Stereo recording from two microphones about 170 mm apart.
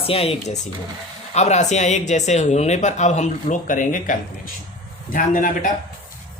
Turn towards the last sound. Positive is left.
turn(degrees=50)  # may be behind; listen again after turning